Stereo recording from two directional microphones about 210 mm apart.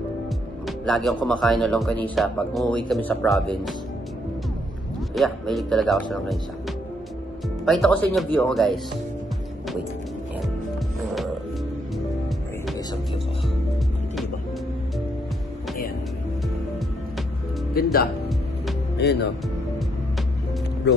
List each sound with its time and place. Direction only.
0.7 s speech: centre (ahead or behind)
5.1 s speech: centre (ahead or behind)
7.6 s speech: centre (ahead or behind)
17.8 s music: 45° left (ahead or behind)
18.9 s speech: 50° left (ahead or behind)
20.9 s speech: 50° left (ahead or behind)